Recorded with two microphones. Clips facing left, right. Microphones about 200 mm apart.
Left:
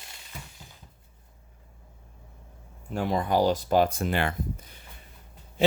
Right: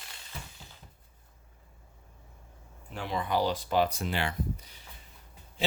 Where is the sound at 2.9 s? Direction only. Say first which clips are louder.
Left 5 dB; 45° left (ahead or behind).